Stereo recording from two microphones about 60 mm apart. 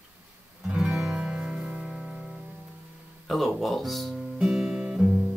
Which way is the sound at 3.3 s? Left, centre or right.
Centre.